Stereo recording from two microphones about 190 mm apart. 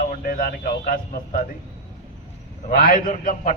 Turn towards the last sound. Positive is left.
turn(degrees=40)  # may be behind; listen again after turning